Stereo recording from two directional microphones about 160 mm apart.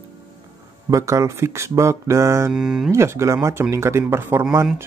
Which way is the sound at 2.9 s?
15° right (ahead or behind).